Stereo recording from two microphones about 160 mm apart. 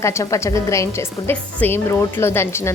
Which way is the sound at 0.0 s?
20° left (ahead or behind).